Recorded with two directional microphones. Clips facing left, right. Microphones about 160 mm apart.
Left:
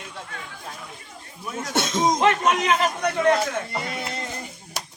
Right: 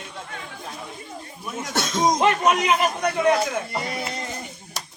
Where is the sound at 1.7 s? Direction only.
25° left (ahead or behind).